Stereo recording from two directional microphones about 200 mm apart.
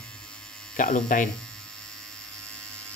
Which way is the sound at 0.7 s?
45° left (ahead or behind).